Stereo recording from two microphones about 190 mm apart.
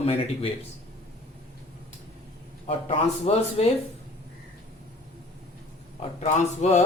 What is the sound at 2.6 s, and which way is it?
A man's voice, 30° left (ahead or behind).